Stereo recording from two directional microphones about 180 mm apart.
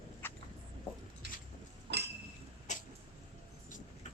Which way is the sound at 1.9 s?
65° right (ahead or behind).